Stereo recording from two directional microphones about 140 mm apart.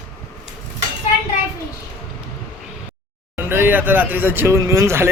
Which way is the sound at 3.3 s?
15° right (ahead or behind).